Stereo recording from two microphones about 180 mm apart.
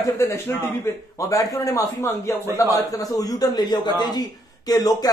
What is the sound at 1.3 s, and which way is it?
A man's voice, 20° left (ahead or behind).